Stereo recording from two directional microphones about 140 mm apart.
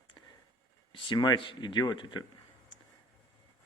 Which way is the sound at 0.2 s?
35° left (ahead or behind).